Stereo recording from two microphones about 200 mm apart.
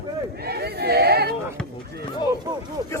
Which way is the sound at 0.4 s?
55° right (ahead or behind).